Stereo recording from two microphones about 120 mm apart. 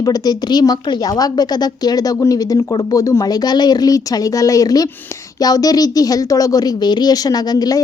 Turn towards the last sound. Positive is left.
turn(degrees=30)  # may be behind; listen again after turning